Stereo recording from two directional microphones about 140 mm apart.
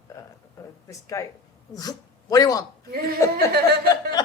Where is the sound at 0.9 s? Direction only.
20° left (ahead or behind).